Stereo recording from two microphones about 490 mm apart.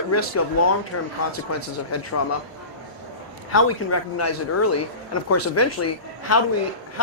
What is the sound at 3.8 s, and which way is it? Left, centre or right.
A man's voice, left.